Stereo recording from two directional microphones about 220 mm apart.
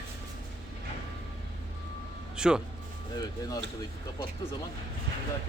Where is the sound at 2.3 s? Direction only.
5° right (ahead or behind).